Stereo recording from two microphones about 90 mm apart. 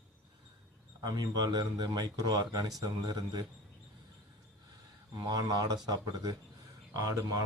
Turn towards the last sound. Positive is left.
turn(degrees=-40)  # may be behind; listen again after turning